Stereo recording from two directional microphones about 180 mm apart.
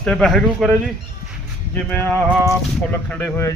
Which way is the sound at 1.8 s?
10° left (ahead or behind).